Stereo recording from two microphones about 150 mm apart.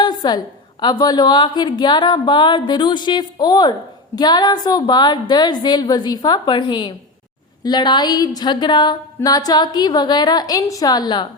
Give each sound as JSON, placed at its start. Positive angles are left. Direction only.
{"t": 0.0, "sound": "a woman's voice", "side_deg": 30}